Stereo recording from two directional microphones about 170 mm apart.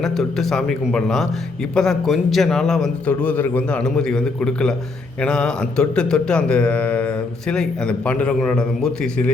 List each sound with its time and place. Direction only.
0.0 s a man's voice: 5° left (ahead or behind)